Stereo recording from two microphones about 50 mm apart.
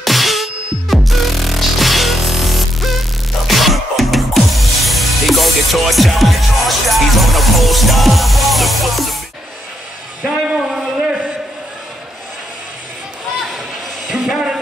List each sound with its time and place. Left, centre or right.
0.0 s music: centre
10.3 s a sound: centre
14.1 s music: centre